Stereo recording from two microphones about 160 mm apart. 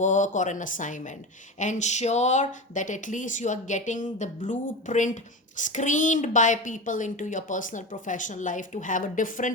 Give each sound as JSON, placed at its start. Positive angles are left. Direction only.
{"t": 0.0, "sound": "speech", "side_deg": 50}